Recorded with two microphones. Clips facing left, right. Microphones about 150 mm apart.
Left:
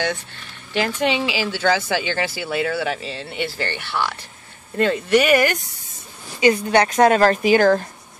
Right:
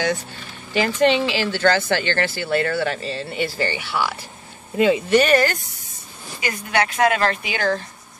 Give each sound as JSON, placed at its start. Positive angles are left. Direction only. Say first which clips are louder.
{"t": 0.0, "sound": "speech", "louder": "right 2 dB", "side_deg": 0}
{"t": 5.2, "sound": "speech", "louder": "even", "side_deg": 15}
{"t": 6.4, "sound": "speech", "louder": "left 7 dB", "side_deg": 35}